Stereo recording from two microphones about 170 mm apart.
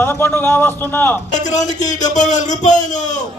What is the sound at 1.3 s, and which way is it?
A man's voice, 45° left (ahead or behind).